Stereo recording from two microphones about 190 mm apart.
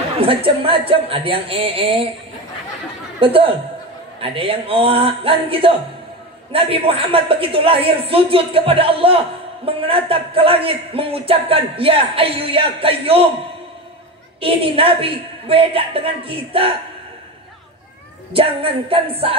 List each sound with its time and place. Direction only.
0.2 s speech: 30° right (ahead or behind)
3.2 s speech: 30° right (ahead or behind)
14.4 s speech: 30° right (ahead or behind)
18.3 s speech: 30° right (ahead or behind)